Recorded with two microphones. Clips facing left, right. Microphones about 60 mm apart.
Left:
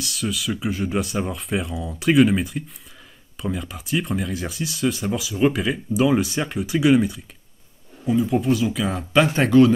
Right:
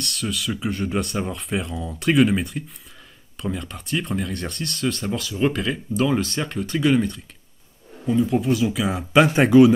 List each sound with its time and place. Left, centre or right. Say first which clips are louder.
0.0 s speech: left 1 dB; centre